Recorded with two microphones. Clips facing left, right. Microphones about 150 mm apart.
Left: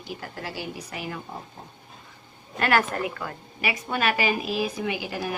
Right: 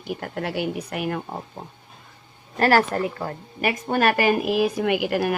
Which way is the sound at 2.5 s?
35° right (ahead or behind).